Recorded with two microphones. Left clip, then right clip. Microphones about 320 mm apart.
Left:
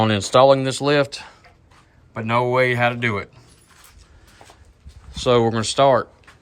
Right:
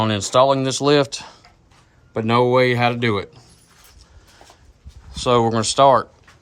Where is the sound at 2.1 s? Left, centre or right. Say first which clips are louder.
Right 3 dB; right.